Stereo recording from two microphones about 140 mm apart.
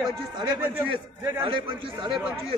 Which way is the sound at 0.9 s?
35° right (ahead or behind).